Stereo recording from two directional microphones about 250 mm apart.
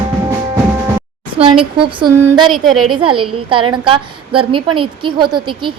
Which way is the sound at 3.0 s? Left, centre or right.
Right.